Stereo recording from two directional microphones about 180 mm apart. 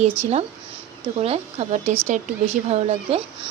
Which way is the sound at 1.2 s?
35° right (ahead or behind).